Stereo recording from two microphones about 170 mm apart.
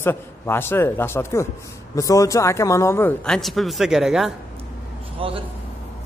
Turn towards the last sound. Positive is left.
turn(degrees=-30)  # may be behind; listen again after turning